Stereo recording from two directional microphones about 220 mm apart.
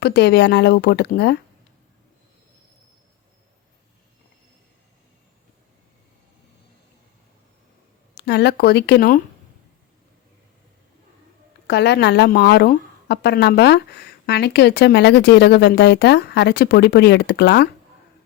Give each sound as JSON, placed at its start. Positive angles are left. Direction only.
{"t": 0.0, "sound": "speech", "side_deg": 50}
{"t": 8.1, "sound": "speech", "side_deg": 50}
{"t": 11.7, "sound": "speech", "side_deg": 50}